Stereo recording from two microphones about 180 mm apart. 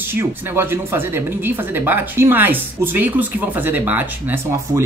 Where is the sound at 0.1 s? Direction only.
15° right (ahead or behind).